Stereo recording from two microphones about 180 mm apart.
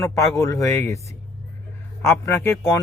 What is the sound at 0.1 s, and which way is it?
A man's voice, 15° left (ahead or behind).